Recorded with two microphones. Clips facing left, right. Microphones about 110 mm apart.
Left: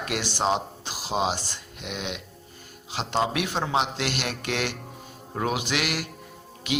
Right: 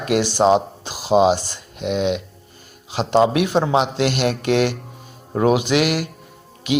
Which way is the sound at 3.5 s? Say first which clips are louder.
Right 8 dB; 65° right (ahead or behind).